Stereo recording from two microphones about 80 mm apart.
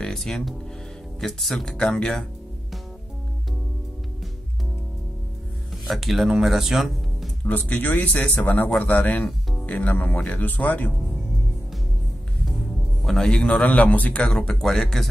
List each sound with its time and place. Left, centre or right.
0.0 s speech: centre
5.9 s speech: centre
7.4 s speech: left
13.0 s speech: centre